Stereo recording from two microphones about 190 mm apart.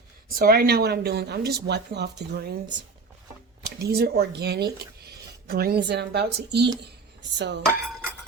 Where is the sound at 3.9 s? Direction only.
55° right (ahead or behind).